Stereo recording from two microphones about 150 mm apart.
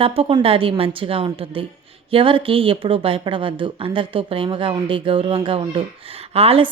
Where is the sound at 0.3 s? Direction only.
35° right (ahead or behind).